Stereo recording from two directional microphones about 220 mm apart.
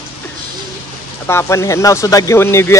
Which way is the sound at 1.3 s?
10° left (ahead or behind).